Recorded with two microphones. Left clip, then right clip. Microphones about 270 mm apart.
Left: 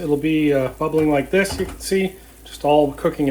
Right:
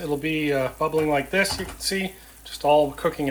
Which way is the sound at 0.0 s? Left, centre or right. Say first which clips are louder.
Left 6 dB; centre.